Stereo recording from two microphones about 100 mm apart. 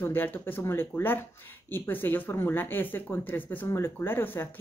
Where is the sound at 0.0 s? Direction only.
20° left (ahead or behind).